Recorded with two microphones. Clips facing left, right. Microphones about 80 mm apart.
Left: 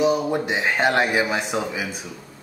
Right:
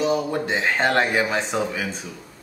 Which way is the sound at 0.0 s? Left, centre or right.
Centre.